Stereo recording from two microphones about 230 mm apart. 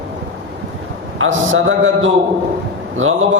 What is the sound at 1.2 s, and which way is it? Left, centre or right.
A man's voice, right.